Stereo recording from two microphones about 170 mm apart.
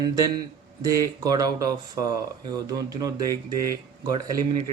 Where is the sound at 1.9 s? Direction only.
20° right (ahead or behind).